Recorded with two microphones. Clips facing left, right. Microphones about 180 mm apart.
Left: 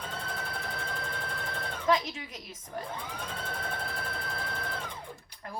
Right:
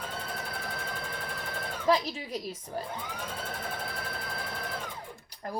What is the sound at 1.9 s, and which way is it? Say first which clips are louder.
Speech: right 2 dB; 35° right (ahead or behind).